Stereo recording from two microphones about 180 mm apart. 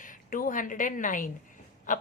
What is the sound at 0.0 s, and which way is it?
A woman's voice, 50° left (ahead or behind).